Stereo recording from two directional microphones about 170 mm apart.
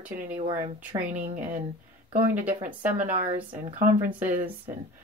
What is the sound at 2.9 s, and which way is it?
A woman's voice, 50° right (ahead or behind).